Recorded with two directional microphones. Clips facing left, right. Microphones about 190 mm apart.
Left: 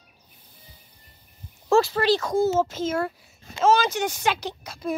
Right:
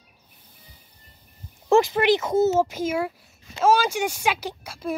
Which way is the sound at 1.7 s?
15° right (ahead or behind).